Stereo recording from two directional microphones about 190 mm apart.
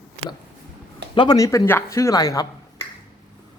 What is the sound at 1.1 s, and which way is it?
A woman's voice, 20° left (ahead or behind).